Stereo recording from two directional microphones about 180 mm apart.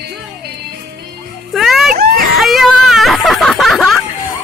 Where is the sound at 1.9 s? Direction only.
60° right (ahead or behind).